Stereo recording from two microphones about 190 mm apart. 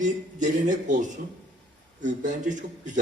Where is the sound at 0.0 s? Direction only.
40° right (ahead or behind).